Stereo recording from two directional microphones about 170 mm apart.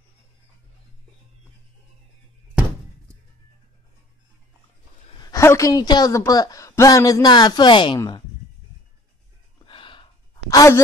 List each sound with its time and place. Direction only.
5.2 s a woman's voice: 20° left (ahead or behind)
9.7 s a sound: 30° left (ahead or behind)
10.5 s a woman's voice: 20° left (ahead or behind)